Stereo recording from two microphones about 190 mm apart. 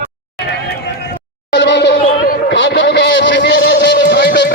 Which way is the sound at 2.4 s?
70° left (ahead or behind).